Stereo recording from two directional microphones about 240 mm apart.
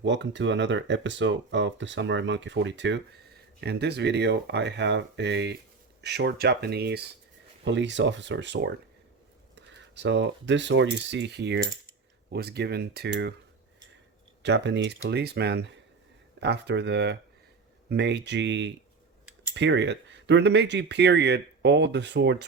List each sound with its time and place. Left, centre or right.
0.0 s speech: right
14.4 s speech: right